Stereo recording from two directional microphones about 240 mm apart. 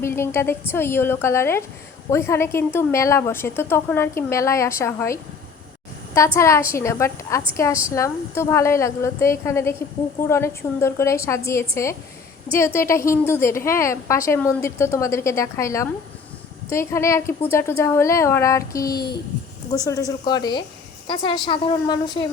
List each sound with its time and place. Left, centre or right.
0.0 s a woman's voice: centre